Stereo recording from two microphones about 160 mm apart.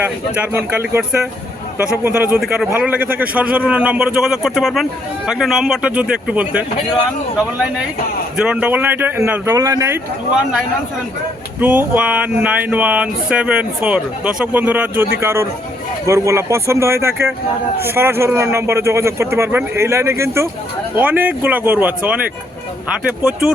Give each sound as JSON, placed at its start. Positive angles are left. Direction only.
{"t": 0.3, "sound": "a man's voice", "side_deg": -10}
{"t": 8.4, "sound": "a man's voice", "side_deg": -5}
{"t": 11.6, "sound": "a man's voice", "side_deg": -10}